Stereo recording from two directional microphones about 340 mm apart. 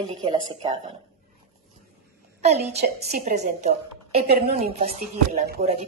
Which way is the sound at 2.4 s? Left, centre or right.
Centre.